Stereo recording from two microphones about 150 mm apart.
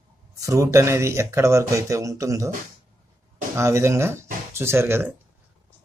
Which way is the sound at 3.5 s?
20° right (ahead or behind).